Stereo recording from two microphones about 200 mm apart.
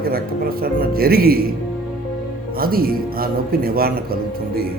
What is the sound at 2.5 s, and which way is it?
A man's voice, 50° right (ahead or behind).